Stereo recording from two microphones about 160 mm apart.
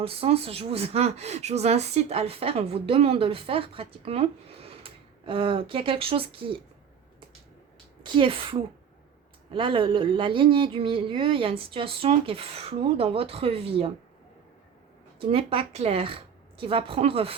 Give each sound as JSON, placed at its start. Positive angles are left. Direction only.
{"t": 0.0, "sound": "speech", "side_deg": -35}
{"t": 8.0, "sound": "speech", "side_deg": -30}
{"t": 15.3, "sound": "speech", "side_deg": -35}